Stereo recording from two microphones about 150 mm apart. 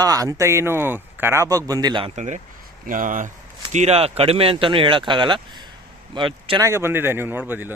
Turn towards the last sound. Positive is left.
turn(degrees=-15)  # may be behind; listen again after turning